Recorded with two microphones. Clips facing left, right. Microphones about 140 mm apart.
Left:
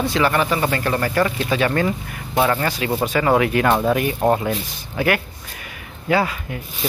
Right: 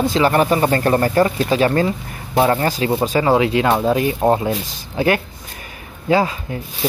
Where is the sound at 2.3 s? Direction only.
30° right (ahead or behind).